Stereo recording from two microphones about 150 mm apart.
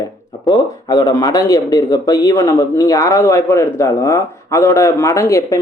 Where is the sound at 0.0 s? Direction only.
25° left (ahead or behind).